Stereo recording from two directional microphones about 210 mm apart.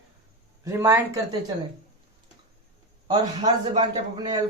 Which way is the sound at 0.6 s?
15° right (ahead or behind).